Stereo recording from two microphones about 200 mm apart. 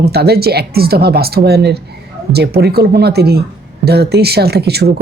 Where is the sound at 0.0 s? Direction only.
55° right (ahead or behind).